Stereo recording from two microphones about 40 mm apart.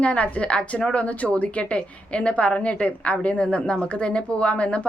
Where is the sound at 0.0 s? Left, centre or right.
Left.